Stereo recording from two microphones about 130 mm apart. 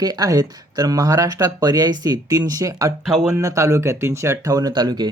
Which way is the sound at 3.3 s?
25° right (ahead or behind).